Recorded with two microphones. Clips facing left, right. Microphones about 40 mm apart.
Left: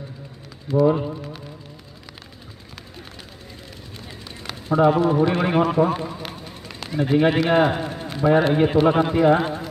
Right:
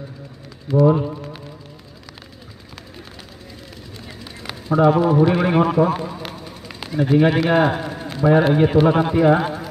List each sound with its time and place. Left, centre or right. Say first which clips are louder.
0.7 s speech: right 2 dB; centre
4.6 s speech: right 2 dB; centre
6.1 s vehicle: right 2 dB; centre
7.1 s speech: right 2 dB; centre
7.8 s a sound: right 1 dB; centre
8.1 s speech: right 2 dB; centre